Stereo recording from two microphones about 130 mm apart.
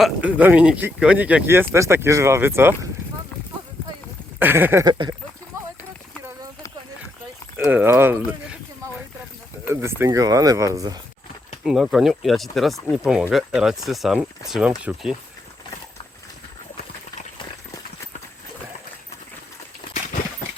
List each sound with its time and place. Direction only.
0.2 s speech: 10° right (ahead or behind)
4.4 s speech: 15° right (ahead or behind)
4.9 s a sound: 35° right (ahead or behind)
7.5 s speech: 15° right (ahead or behind)
9.6 s speech: 20° right (ahead or behind)
11.6 s speech: 5° right (ahead or behind)